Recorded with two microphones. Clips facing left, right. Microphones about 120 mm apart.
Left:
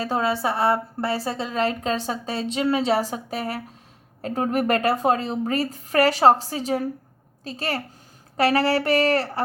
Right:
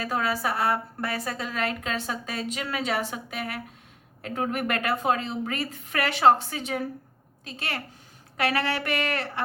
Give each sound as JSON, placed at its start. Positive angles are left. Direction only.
{"t": 0.0, "sound": "a woman's voice", "side_deg": 30}